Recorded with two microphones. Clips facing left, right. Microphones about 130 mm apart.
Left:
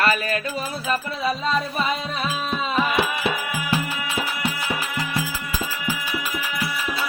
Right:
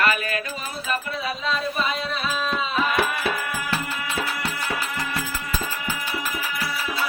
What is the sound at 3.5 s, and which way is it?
Music, 10° left (ahead or behind).